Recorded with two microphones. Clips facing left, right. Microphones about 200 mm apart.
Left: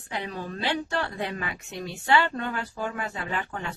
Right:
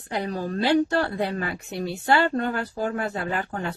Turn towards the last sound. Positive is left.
turn(degrees=-40)  # may be behind; listen again after turning